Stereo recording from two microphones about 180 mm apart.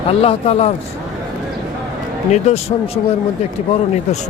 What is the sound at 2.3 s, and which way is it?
Speech, 40° left (ahead or behind).